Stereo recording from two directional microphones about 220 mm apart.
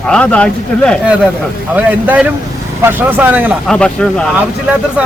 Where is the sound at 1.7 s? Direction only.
5° right (ahead or behind).